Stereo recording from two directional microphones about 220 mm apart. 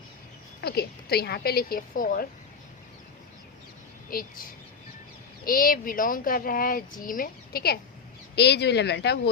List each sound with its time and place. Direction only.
0.6 s speech: 45° left (ahead or behind)
4.1 s speech: 40° left (ahead or behind)
5.5 s speech: 40° left (ahead or behind)